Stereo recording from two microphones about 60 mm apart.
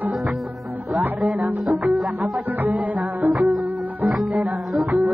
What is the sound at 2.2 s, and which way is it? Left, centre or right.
Music, right.